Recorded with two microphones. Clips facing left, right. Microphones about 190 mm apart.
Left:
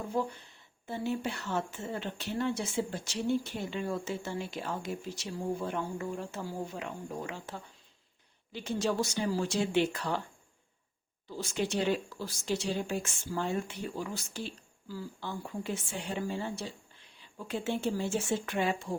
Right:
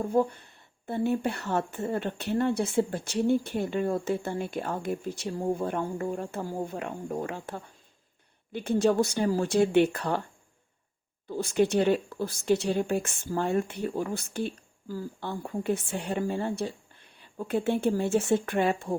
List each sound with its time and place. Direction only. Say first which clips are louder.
0.0 s a woman's voice: right 7 dB; 55° right (ahead or behind)
11.3 s a woman's voice: right 8 dB; 55° right (ahead or behind)